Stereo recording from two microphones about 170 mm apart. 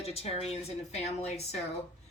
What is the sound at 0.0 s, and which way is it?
A woman's voice, 35° left (ahead or behind).